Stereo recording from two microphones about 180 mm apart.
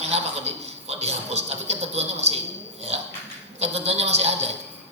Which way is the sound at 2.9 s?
35° right (ahead or behind).